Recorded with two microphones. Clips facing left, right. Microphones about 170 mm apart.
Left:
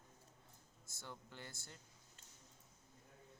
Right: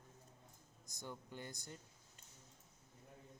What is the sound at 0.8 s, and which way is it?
Speech, 15° right (ahead or behind).